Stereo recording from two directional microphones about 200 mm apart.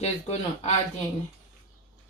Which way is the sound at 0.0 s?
35° left (ahead or behind).